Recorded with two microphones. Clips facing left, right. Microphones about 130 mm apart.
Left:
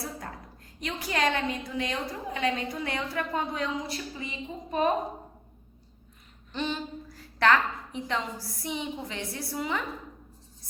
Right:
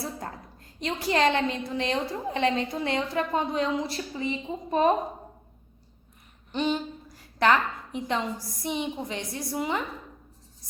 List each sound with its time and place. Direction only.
0.8 s a woman's voice: 30° right (ahead or behind)
6.5 s a woman's voice: 15° right (ahead or behind)